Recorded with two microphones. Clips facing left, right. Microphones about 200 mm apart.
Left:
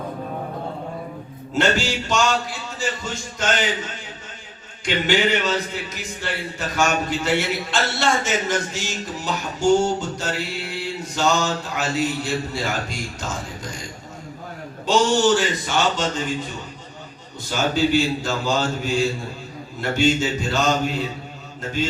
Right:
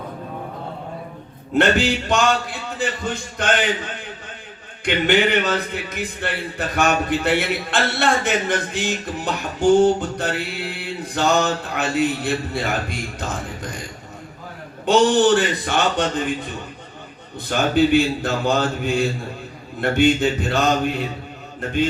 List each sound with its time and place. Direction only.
1.5 s a man's voice: 60° right (ahead or behind)
4.9 s a man's voice: 55° right (ahead or behind)
14.8 s a man's voice: 55° right (ahead or behind)
17.5 s a man's voice: 55° right (ahead or behind)